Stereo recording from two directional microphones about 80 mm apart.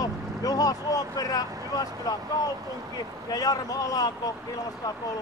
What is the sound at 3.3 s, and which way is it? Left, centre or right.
Speech, left.